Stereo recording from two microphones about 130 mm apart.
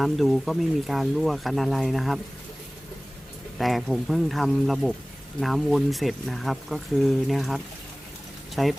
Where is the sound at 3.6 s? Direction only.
Centre (ahead or behind).